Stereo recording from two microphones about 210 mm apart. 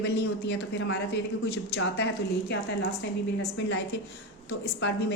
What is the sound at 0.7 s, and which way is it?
Speech, 50° left (ahead or behind).